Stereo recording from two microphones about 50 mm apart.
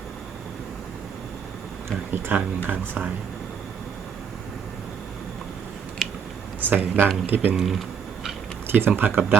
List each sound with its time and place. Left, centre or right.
2.0 s speech: right
6.0 s a sound: centre
6.6 s speech: right
7.5 s speech: centre
8.6 s a sound: right
9.0 s speech: right